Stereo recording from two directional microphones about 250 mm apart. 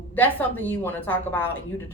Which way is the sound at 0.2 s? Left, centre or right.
Centre.